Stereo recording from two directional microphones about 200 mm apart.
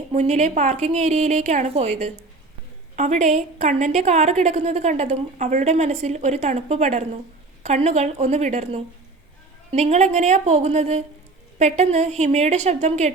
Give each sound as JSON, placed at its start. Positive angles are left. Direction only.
{"t": 0.1, "sound": "a woman's voice", "side_deg": -35}